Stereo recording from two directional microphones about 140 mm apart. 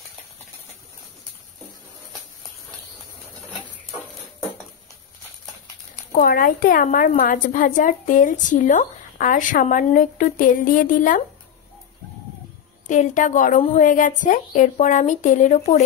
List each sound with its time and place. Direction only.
6.1 s a woman's voice: 90° left; by 11.2 s 70° left (ahead or behind)
12.8 s a woman's voice: 65° left (ahead or behind)